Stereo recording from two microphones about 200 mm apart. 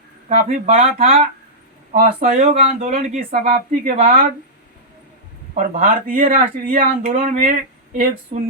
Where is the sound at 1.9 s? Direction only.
40° right (ahead or behind).